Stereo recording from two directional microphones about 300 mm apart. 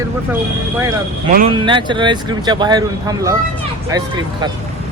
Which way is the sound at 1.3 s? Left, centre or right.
Right.